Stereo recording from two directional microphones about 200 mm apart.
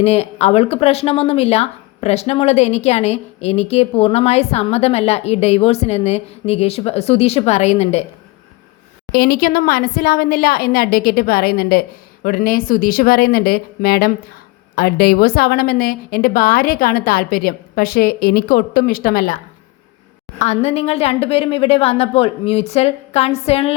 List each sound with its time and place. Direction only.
0.0 s speech: 30° left (ahead or behind)
9.1 s speech: 50° left (ahead or behind)
20.4 s speech: 35° left (ahead or behind)